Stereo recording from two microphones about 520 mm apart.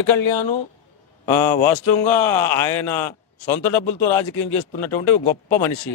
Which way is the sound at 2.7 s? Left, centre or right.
Left.